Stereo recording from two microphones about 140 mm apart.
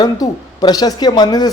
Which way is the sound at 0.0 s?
30° left (ahead or behind).